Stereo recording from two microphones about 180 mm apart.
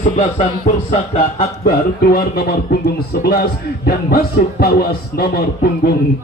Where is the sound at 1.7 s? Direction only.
55° left (ahead or behind).